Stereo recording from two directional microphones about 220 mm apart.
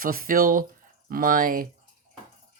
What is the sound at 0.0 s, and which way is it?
Speech, 40° right (ahead or behind).